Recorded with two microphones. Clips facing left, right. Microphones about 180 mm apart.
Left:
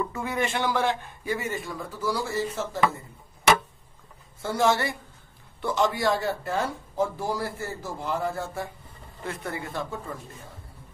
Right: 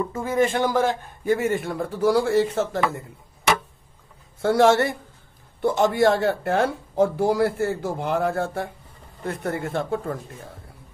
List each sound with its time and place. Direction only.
0.1 s speech: 45° right (ahead or behind); by 2.8 s 70° right (ahead or behind)
4.4 s speech: 80° right
5.6 s speech: 55° right (ahead or behind)
9.2 s speech: 50° right (ahead or behind)